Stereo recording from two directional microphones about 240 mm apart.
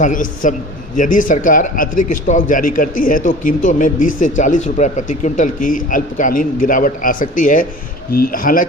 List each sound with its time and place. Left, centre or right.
0.0 s speech: left